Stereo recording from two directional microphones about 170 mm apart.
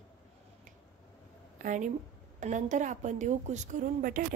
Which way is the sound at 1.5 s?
50° right (ahead or behind).